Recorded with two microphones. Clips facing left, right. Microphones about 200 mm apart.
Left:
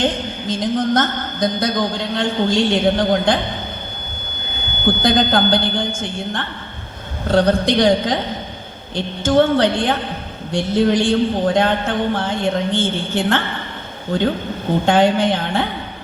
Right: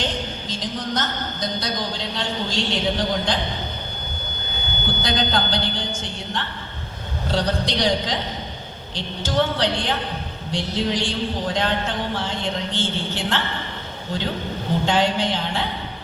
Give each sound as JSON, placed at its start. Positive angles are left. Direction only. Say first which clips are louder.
{"t": 0.0, "sound": "a woman's voice", "louder": "left 7 dB", "side_deg": 55}
{"t": 4.9, "sound": "a man's voice", "louder": "left 8 dB", "side_deg": 55}